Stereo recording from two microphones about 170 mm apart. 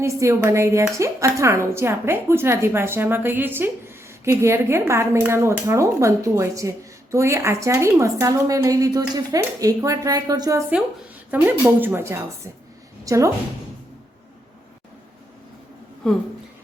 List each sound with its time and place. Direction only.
0.0 s a woman's voice: 15° right (ahead or behind)
11.3 s a woman's voice: 10° right (ahead or behind)
16.0 s speech: 5° left (ahead or behind)